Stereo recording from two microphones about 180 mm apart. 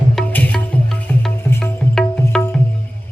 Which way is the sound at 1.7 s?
10° left (ahead or behind).